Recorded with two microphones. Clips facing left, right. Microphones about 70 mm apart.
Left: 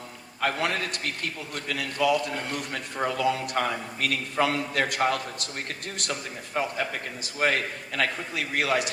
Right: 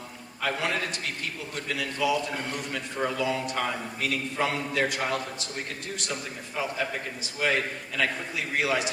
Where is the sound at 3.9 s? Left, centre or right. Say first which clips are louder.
Left 3 dB; left.